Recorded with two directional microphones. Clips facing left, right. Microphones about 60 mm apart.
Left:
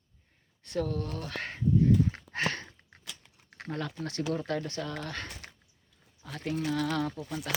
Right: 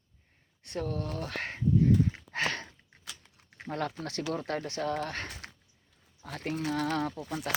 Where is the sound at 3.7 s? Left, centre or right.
Right.